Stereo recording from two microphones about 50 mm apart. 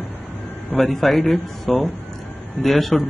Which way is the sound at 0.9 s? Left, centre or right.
Centre.